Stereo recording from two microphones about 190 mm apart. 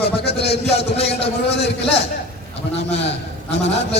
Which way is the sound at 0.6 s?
30° left (ahead or behind).